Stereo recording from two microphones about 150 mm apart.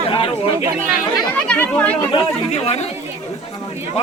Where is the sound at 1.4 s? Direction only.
10° left (ahead or behind).